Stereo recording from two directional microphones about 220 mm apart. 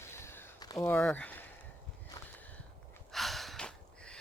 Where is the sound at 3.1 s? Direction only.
Centre (ahead or behind).